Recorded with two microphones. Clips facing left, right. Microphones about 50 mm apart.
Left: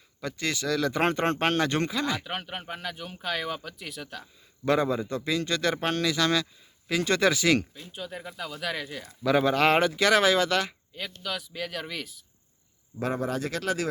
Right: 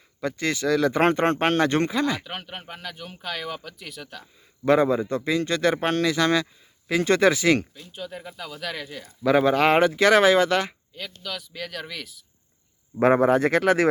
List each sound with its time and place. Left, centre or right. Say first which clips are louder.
0.2 s speech: right 5 dB; centre
2.2 s speech: left 1 dB; centre
4.6 s speech: right 5 dB; centre
7.9 s speech: right 1 dB; centre
9.2 s speech: right 3 dB; centre
10.9 s speech: left 2 dB; centre
13.0 s speech: right 11 dB; right